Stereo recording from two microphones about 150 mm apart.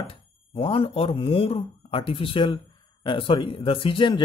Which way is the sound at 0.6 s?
40° left (ahead or behind).